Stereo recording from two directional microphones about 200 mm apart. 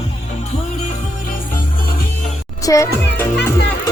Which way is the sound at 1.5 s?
45° left (ahead or behind).